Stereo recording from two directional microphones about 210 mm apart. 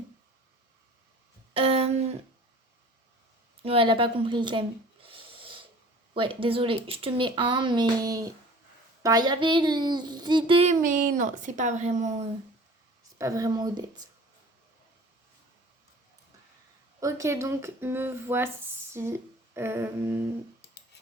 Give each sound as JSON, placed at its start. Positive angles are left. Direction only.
{"t": 1.5, "sound": "a sound", "side_deg": -25}
{"t": 3.6, "sound": "a sound", "side_deg": -25}
{"t": 6.1, "sound": "a child's voice", "side_deg": -25}
{"t": 13.1, "sound": "speech", "side_deg": -15}
{"t": 17.0, "sound": "speech", "side_deg": -15}
{"t": 18.9, "sound": "humming", "side_deg": -10}